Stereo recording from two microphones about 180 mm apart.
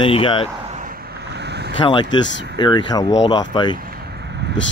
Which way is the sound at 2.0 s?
90° left.